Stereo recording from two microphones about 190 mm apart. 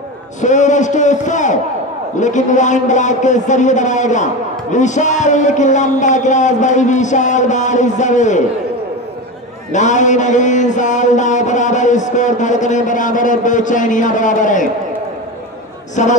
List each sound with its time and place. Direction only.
0.4 s a man's voice: 40° left (ahead or behind)
9.7 s a man's voice: 40° left (ahead or behind)